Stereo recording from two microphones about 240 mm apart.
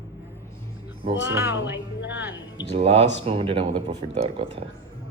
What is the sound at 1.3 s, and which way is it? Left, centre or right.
Speech, centre.